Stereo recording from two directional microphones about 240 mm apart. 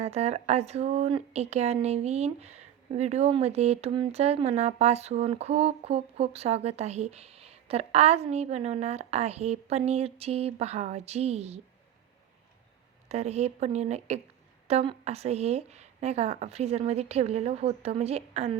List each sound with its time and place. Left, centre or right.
0.0 s speech: right
13.1 s speech: right